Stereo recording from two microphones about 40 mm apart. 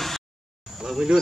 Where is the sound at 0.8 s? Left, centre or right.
Centre.